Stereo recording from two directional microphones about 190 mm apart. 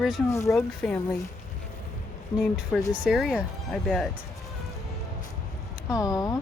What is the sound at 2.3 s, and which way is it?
Speech, 15° left (ahead or behind).